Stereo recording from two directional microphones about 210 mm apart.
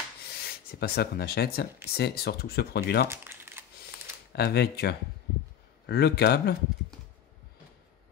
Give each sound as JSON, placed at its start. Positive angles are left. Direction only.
{"t": 0.3, "sound": "rub", "side_deg": 50}
{"t": 2.0, "sound": "speech", "side_deg": 50}
{"t": 3.1, "sound": "crumpling", "side_deg": -10}
{"t": 4.3, "sound": "speech", "side_deg": 50}